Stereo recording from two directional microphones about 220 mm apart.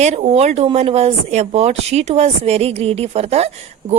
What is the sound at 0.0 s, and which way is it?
Speech, 30° right (ahead or behind).